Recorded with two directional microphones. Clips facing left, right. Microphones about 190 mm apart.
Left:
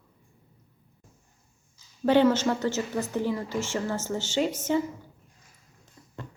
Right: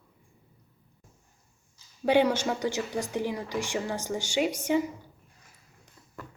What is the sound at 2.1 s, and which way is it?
Speech, 10° right (ahead or behind).